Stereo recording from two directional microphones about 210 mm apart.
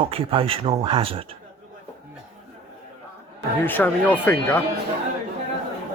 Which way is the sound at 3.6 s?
10° left (ahead or behind).